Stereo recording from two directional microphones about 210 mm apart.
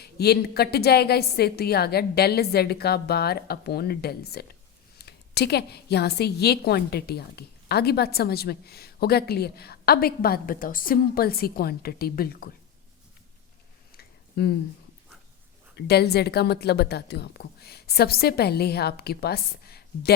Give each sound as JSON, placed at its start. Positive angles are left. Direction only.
{"t": 0.0, "sound": "a woman's voice", "side_deg": 50}
{"t": 13.9, "sound": "a sound", "side_deg": 50}
{"t": 15.7, "sound": "a woman's voice", "side_deg": 50}